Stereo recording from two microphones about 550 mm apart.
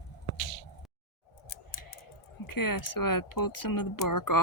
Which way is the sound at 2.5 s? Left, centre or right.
Left.